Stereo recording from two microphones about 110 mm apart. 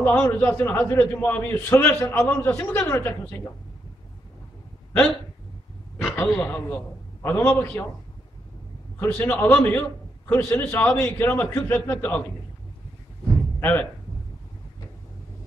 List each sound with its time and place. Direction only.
0.0 s a man's voice: 15° left (ahead or behind)
6.1 s a man's voice: 15° left (ahead or behind)
9.0 s a man's voice: 20° left (ahead or behind)
13.6 s speech: 20° left (ahead or behind)